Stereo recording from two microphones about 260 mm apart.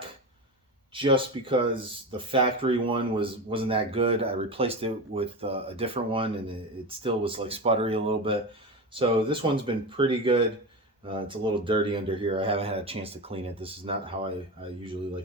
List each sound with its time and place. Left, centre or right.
0.9 s speech: centre